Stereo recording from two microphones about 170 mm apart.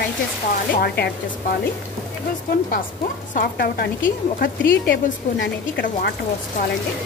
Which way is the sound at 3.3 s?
60° left (ahead or behind).